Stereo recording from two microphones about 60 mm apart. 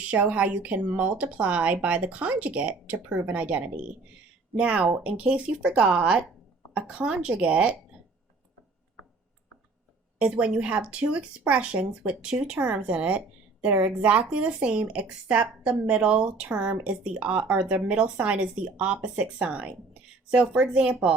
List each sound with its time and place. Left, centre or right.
0.0 s speech: right
10.2 s a woman's voice: centre
18.9 s speech: right
19.2 s speech: centre